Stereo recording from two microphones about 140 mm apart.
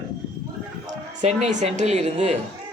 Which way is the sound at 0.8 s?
55° right (ahead or behind).